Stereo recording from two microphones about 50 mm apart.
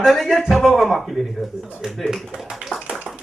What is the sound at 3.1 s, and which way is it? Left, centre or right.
Tap, centre.